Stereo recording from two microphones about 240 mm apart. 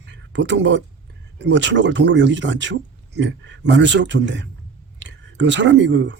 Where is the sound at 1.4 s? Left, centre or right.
Right.